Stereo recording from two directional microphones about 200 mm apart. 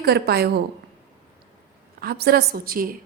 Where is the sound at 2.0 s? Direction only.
50° right (ahead or behind).